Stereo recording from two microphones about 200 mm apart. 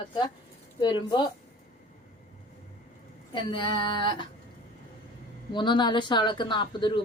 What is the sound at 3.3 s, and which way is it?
Speech, 25° left (ahead or behind).